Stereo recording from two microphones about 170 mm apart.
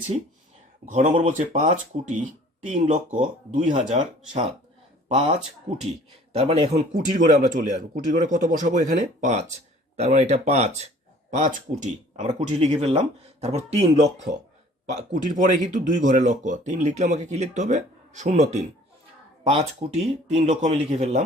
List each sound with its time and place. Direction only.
0.9 s speech: 45° right (ahead or behind)
5.0 s speech: 40° right (ahead or behind)